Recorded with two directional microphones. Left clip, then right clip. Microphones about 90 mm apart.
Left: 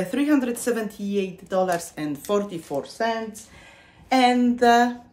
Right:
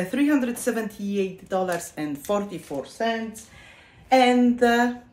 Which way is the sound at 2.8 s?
30° left (ahead or behind).